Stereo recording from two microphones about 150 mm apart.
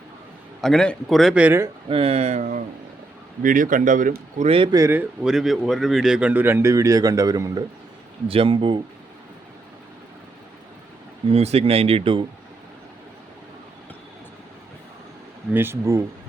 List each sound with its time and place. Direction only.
0.6 s a man's voice: 5° left (ahead or behind); by 1.7 s 15° right (ahead or behind)
1.9 s speech: 40° right (ahead or behind); by 4.4 s 60° right (ahead or behind)
4.4 s speech: 35° right (ahead or behind)
4.7 s speech: 15° right (ahead or behind)
8.3 s speech: 35° right (ahead or behind)
11.3 s speech: 45° right (ahead or behind)
15.5 s speech: 15° right (ahead or behind)